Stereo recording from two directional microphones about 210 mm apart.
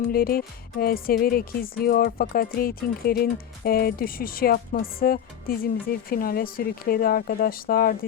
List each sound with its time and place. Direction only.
0.1 s speech: 45° left (ahead or behind)